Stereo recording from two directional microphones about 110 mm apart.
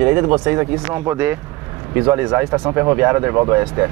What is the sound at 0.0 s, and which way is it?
Speech, 20° right (ahead or behind).